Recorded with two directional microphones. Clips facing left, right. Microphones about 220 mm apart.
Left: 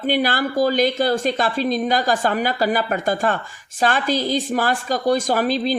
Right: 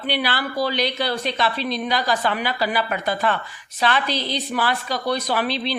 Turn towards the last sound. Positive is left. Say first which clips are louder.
# left 4 dB
turn(degrees=45)  # may be behind; listen again after turning